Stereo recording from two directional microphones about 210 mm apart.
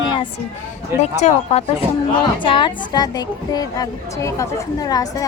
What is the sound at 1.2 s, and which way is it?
Speech, 30° left (ahead or behind).